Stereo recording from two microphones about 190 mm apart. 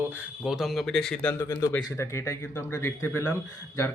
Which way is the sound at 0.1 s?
5° right (ahead or behind).